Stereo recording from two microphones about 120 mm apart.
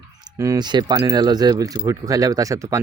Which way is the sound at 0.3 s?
25° right (ahead or behind).